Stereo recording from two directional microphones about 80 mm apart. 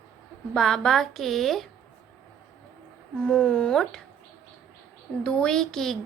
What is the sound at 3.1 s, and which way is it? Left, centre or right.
Speech, centre.